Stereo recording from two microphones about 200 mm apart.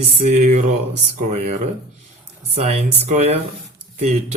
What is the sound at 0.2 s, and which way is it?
Speech, 35° right (ahead or behind).